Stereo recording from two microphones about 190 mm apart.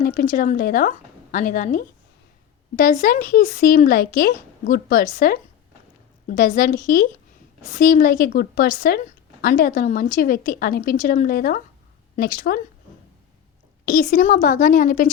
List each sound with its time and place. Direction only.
0.0 s speech: 45° left (ahead or behind)
13.8 s speech: 45° left (ahead or behind)